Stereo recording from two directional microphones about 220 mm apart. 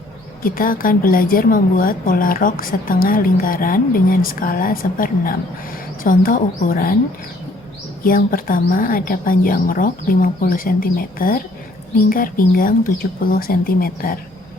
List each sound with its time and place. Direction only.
0.4 s a woman's voice: 40° left (ahead or behind)
8.0 s a woman's voice: 40° left (ahead or behind)